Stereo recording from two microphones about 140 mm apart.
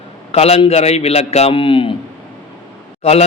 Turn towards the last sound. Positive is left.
turn(degrees=50)  # may be behind; listen again after turning